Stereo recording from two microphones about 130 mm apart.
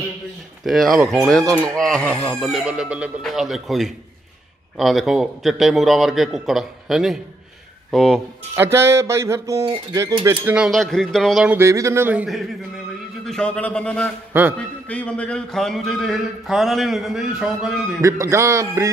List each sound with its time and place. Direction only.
0.7 s a man's voice: centre (ahead or behind)
2.5 s speech: 5° right (ahead or behind)
8.5 s a sound: 20° right (ahead or behind)
10.4 s speech: 5° right (ahead or behind)
11.4 s a sound: 20° right (ahead or behind)
13.2 s a man's voice: 5° left (ahead or behind)
14.3 s speech: 15° right (ahead or behind)
14.9 s speech: 10° left (ahead or behind)
18.0 s a sound: 25° right (ahead or behind)